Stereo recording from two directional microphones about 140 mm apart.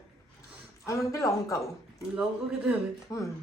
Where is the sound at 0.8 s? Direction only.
20° left (ahead or behind).